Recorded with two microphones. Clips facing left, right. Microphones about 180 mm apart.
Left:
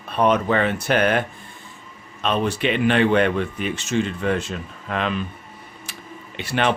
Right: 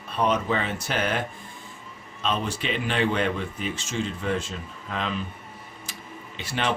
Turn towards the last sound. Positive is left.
turn(degrees=65)  # may be behind; listen again after turning